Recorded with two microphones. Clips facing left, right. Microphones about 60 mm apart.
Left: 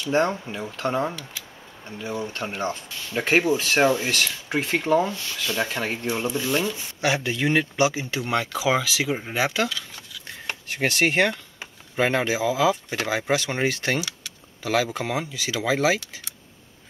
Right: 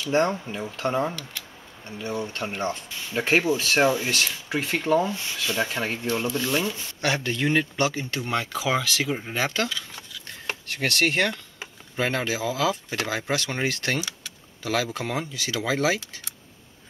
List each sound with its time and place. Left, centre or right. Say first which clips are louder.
0.0 s speech: even; centre
5.1 s speech: right 1 dB; right
5.4 s speech: left 1 dB; centre
6.0 s speech: even; centre
6.5 s speech: left 1 dB; centre
10.7 s speech: left 2 dB; centre
14.0 s speech: left 1 dB; centre